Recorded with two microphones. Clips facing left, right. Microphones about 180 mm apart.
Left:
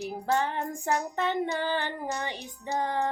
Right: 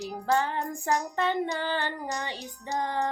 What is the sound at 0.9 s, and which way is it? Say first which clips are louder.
Music: right 1 dB; 5° left (ahead or behind).